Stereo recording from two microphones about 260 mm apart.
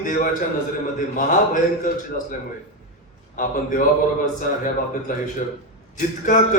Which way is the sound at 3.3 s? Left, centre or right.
Left.